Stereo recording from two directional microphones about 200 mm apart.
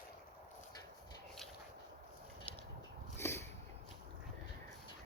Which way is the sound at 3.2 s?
10° left (ahead or behind).